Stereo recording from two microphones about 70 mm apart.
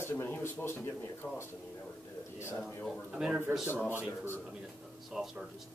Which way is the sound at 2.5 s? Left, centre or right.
Centre.